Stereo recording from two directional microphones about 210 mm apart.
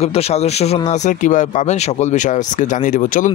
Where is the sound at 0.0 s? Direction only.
30° left (ahead or behind).